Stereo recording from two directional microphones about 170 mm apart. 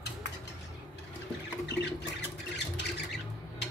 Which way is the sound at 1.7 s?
80° left.